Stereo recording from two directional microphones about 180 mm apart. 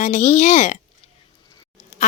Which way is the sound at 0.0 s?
40° left (ahead or behind).